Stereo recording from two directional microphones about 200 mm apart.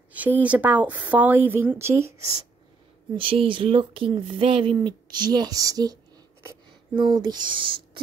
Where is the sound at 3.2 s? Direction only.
25° right (ahead or behind).